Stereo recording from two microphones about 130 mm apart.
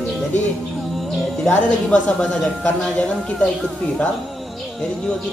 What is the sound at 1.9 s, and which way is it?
Speech, 10° left (ahead or behind).